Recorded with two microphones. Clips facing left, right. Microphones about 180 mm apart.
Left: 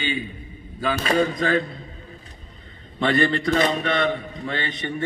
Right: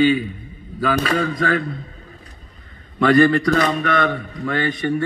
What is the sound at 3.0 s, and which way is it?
A man's voice, 25° left (ahead or behind).